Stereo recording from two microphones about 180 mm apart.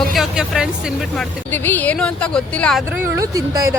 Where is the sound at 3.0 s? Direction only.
20° right (ahead or behind).